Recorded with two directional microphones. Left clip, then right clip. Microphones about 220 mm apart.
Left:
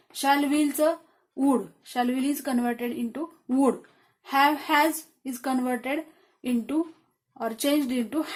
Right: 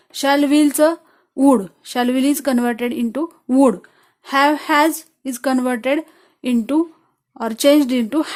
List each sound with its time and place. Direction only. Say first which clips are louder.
0.1 s a woman's voice: right 8 dB; 45° right (ahead or behind)